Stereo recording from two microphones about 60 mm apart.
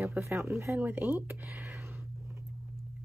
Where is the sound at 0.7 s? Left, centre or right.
Right.